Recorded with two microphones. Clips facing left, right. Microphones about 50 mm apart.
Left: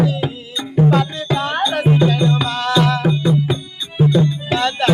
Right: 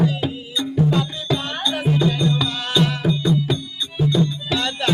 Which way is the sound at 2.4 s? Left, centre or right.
Left.